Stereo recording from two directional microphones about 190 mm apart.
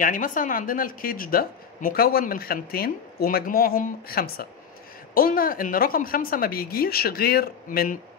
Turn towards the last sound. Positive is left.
turn(degrees=50)  # may be behind; listen again after turning